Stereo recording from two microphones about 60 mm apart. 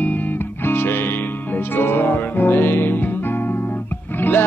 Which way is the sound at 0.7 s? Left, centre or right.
Left.